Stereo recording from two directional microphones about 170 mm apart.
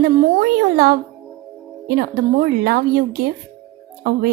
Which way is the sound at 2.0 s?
60° right (ahead or behind).